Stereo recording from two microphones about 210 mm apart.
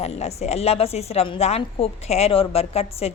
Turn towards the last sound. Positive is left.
turn(degrees=30)  # may be behind; listen again after turning